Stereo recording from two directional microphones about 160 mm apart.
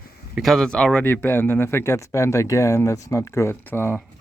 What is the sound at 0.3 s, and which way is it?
Speech, centre (ahead or behind).